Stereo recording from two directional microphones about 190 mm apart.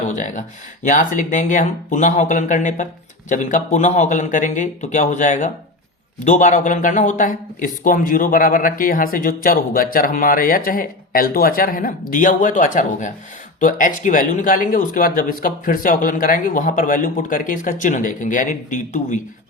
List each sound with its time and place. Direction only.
0.1 s speech: 40° left (ahead or behind)